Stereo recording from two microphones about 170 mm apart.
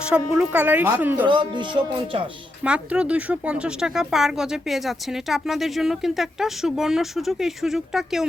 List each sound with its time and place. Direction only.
0.0 s a woman's voice: 5° right (ahead or behind)
1.3 s speech: 25° right (ahead or behind)
2.6 s speech: 5° right (ahead or behind)